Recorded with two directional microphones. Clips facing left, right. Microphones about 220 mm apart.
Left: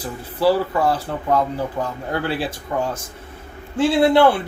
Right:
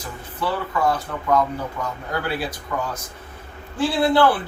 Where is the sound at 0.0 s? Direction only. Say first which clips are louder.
Left 9 dB; 35° left (ahead or behind).